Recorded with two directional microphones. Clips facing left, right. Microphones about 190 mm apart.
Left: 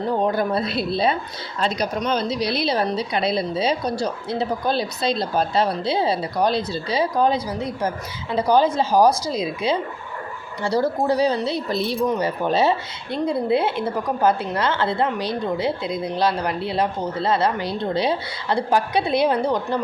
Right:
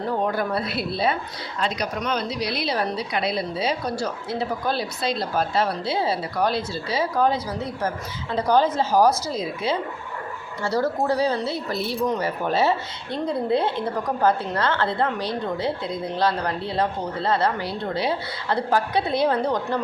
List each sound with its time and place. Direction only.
0.2 s a woman's voice: 20° left (ahead or behind)